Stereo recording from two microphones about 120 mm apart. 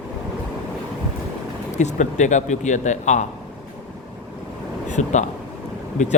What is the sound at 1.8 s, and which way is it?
Speech, 80° left.